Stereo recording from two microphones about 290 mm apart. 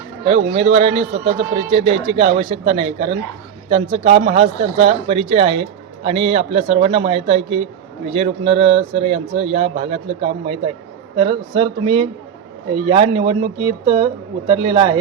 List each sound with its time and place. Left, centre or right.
0.3 s speech: centre